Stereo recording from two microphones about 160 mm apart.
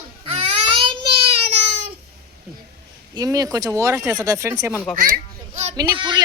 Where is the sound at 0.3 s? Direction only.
30° right (ahead or behind).